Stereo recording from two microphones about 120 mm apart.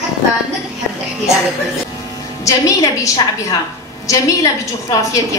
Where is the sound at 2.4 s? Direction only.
30° left (ahead or behind).